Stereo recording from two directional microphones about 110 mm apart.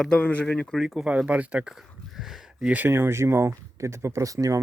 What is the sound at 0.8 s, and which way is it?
Speech, centre (ahead or behind).